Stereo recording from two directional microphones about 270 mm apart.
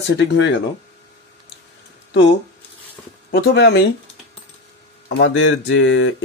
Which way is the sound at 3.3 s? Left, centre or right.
Left.